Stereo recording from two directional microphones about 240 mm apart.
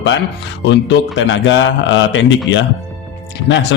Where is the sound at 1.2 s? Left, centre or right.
Left.